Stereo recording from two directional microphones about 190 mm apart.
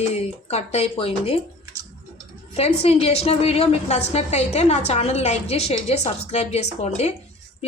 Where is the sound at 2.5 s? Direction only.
30° left (ahead or behind).